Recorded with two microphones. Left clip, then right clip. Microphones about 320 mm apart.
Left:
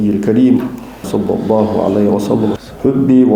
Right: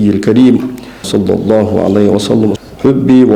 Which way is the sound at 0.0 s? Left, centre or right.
Right.